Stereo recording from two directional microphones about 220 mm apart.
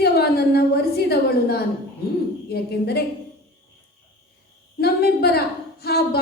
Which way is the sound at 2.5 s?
45° left (ahead or behind).